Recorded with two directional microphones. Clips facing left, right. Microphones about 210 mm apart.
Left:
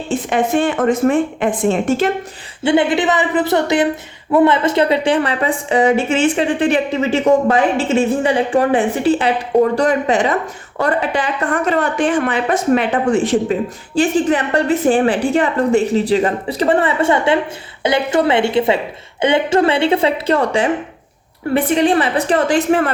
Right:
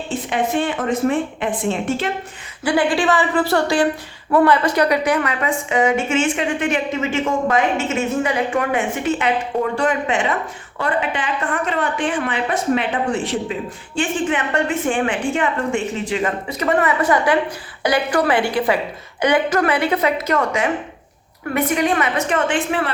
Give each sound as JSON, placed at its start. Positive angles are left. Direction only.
{"t": 0.1, "sound": "speech", "side_deg": 50}
{"t": 2.6, "sound": "a woman's voice", "side_deg": 20}